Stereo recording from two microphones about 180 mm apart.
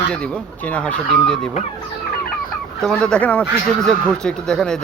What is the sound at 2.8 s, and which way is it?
Speech, 5° left (ahead or behind).